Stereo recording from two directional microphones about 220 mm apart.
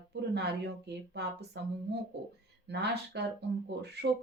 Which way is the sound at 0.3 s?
50° right (ahead or behind).